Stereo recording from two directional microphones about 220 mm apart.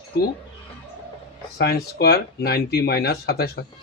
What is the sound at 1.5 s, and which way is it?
Speech, 45° left (ahead or behind).